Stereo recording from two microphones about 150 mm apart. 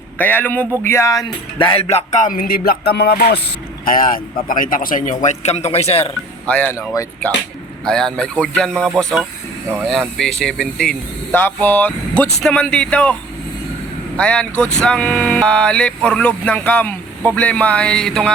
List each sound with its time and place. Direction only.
0.2 s speech: 10° left (ahead or behind); by 3.4 s 90° left
3.8 s a man's voice: 70° left (ahead or behind); by 6.1 s 40° left (ahead or behind)
6.5 s speech: 10° left (ahead or behind)
6.7 s speech: 20° left (ahead or behind)
7.9 s speech: 5° left (ahead or behind)
14.2 s speech: 10° left (ahead or behind)